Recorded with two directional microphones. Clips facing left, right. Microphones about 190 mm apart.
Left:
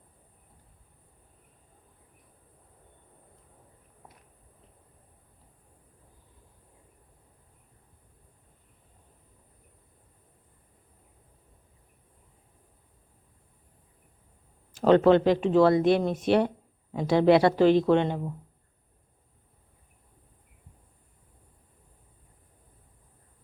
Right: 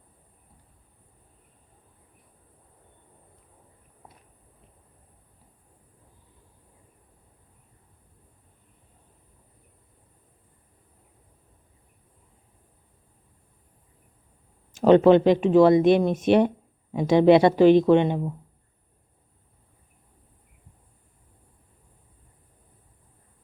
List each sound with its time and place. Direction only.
14.7 s speech: 20° right (ahead or behind)